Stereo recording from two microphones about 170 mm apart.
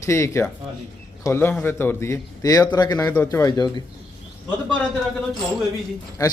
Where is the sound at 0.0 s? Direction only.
15° left (ahead or behind).